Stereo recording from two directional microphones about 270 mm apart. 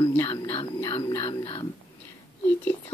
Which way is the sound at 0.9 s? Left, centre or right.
Centre.